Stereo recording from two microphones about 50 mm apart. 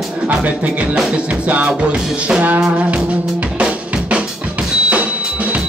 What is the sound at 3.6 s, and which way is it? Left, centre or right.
Drum, right.